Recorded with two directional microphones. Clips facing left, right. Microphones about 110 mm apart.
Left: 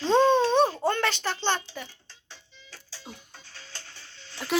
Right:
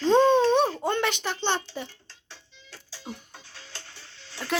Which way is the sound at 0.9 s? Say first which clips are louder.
Even; 20° right (ahead or behind).